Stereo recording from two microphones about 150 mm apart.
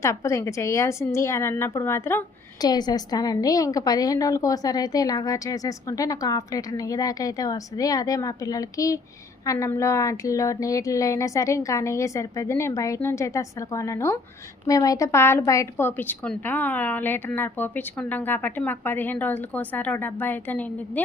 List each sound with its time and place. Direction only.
0.0 s a woman's voice: 20° left (ahead or behind)
2.6 s a woman's voice: 25° left (ahead or behind); by 21.0 s 10° left (ahead or behind)